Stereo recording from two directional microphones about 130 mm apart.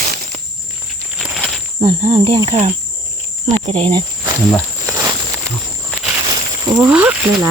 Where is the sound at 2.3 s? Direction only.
35° right (ahead or behind).